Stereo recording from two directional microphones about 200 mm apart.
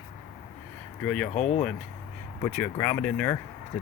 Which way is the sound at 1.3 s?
35° left (ahead or behind).